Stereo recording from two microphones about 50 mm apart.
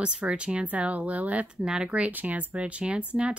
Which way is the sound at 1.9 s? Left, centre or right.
Right.